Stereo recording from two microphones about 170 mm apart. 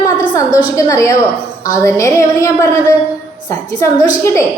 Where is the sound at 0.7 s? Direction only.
20° left (ahead or behind).